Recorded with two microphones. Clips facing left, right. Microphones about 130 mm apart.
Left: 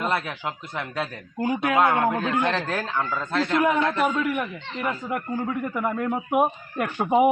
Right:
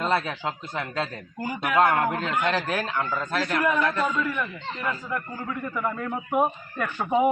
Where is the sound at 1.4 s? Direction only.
20° left (ahead or behind).